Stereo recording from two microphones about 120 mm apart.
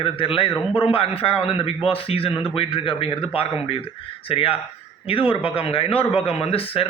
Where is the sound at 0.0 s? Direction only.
50° left (ahead or behind).